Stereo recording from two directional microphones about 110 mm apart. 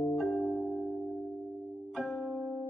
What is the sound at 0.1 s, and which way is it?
Music, centre (ahead or behind).